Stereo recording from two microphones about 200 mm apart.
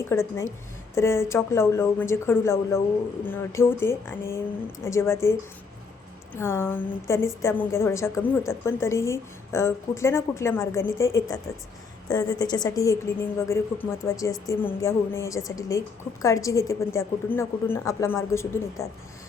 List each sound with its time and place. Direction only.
0.0 s a woman's voice: 15° left (ahead or behind)